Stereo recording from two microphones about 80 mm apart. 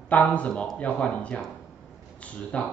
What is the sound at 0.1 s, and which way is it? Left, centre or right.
Speech, centre.